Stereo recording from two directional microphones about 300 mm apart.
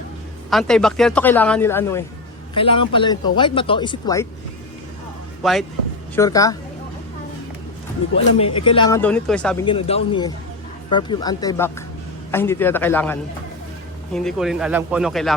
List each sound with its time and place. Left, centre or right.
0.5 s speech: centre
5.4 s speech: centre
6.1 s speech: centre
8.1 s speech: centre
9.6 s speech: centre